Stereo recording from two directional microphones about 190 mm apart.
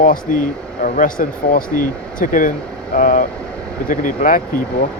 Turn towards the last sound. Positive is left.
turn(degrees=45)  # may be behind; listen again after turning